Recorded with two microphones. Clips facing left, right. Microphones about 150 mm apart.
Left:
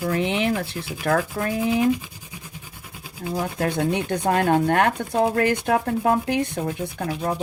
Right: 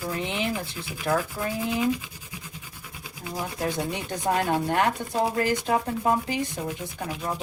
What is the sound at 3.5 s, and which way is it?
Rub, 60° left (ahead or behind).